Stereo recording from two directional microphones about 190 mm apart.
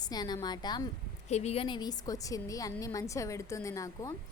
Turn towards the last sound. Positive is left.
turn(degrees=15)  # may be behind; listen again after turning